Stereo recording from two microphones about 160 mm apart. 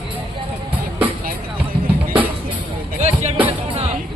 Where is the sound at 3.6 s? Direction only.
35° right (ahead or behind).